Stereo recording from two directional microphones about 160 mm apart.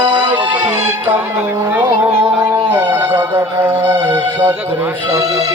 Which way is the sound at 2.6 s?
15° right (ahead or behind).